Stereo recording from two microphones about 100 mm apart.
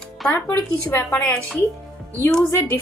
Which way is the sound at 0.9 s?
30° left (ahead or behind).